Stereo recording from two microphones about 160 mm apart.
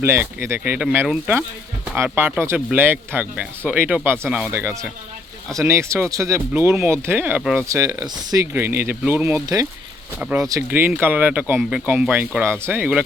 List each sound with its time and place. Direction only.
0.0 s speech: 15° right (ahead or behind)
7.7 s speech: 20° right (ahead or behind)
10.2 s speech: 10° right (ahead or behind)